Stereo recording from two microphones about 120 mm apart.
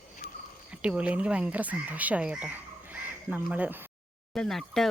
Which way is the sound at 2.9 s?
10° right (ahead or behind).